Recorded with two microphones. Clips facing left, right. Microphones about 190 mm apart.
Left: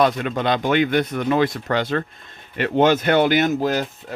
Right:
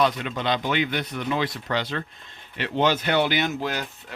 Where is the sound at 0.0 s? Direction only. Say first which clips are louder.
Left 5 dB; 50° left (ahead or behind).